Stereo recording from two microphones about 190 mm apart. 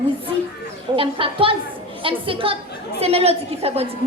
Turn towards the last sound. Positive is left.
turn(degrees=-30)  # may be behind; listen again after turning